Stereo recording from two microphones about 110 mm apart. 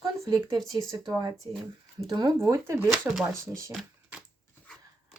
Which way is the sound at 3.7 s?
5° right (ahead or behind).